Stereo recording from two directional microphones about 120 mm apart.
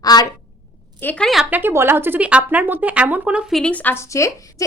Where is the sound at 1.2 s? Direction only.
Centre (ahead or behind).